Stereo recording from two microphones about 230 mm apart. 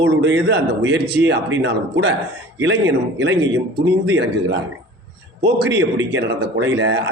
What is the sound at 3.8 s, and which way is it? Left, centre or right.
A man's voice, right.